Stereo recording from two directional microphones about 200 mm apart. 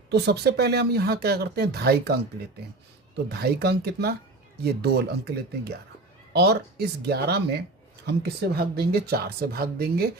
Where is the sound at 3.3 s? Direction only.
50° right (ahead or behind).